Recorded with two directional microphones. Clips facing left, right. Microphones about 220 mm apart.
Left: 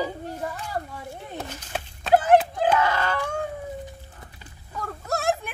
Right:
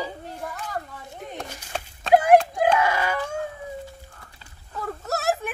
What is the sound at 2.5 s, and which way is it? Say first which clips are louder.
Screaming: right 1 dB; 10° right (ahead or behind).